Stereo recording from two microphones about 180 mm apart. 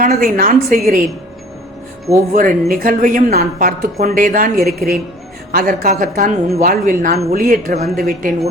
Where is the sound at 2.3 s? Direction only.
50° right (ahead or behind).